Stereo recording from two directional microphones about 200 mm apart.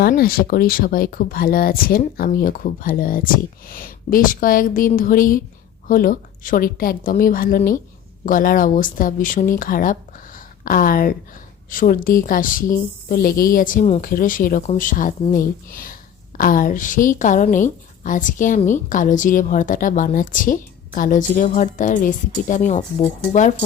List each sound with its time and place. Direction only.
0.0 s a woman's voice: 50° left (ahead or behind)